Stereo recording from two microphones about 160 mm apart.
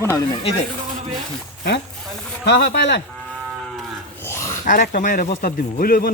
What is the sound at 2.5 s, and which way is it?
Speech, 90° left.